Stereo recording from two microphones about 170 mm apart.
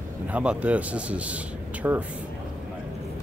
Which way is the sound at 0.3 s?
5° right (ahead or behind).